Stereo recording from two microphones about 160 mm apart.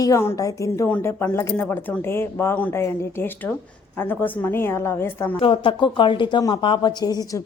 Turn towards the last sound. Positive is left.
turn(degrees=25)  # may be behind; listen again after turning